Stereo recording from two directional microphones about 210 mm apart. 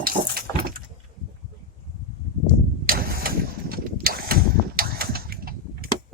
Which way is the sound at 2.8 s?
45° right (ahead or behind).